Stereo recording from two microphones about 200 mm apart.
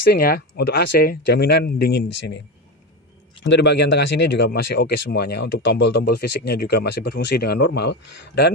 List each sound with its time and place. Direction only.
0.1 s speech: 50° left (ahead or behind)
3.4 s speech: 60° left (ahead or behind)